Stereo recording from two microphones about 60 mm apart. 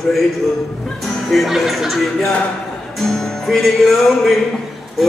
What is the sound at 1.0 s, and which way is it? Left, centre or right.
Speech, centre.